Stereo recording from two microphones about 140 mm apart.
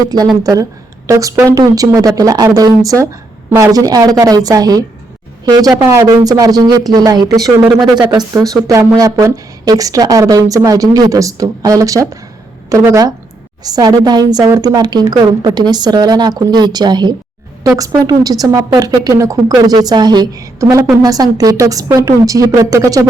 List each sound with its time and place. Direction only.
0.4 s a woman's voice: 25° right (ahead or behind)